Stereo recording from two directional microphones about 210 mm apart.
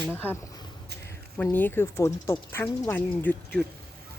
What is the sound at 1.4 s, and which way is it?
Speech, 10° left (ahead or behind).